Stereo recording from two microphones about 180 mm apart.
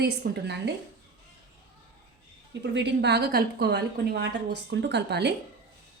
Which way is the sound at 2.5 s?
75° right (ahead or behind).